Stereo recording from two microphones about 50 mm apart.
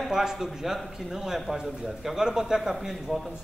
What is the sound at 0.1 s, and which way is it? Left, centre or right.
A man's voice, centre.